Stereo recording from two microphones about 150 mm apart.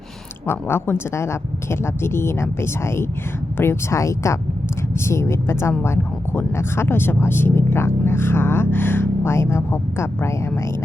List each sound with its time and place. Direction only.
0.4 s speech: 15° left (ahead or behind)